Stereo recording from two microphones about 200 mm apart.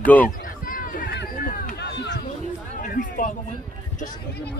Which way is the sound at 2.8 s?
45° left (ahead or behind).